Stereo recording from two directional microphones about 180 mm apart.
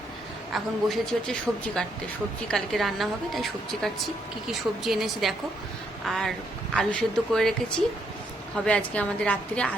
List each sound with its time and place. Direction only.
0.5 s a woman's voice: centre (ahead or behind)
4.8 s a woman's voice: centre (ahead or behind)
8.5 s a woman's voice: 5° left (ahead or behind)